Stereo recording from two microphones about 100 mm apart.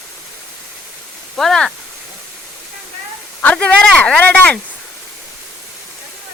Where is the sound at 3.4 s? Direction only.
10° left (ahead or behind).